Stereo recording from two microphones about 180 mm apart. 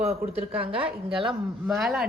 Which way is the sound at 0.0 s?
35° right (ahead or behind).